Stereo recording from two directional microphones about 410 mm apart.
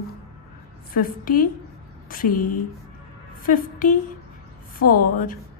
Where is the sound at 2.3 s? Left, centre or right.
Left.